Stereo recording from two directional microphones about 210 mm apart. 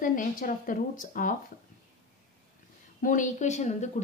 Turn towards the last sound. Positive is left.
turn(degrees=35)  # may be behind; listen again after turning